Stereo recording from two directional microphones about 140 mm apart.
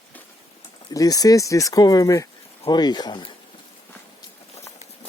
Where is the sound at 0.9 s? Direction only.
25° left (ahead or behind).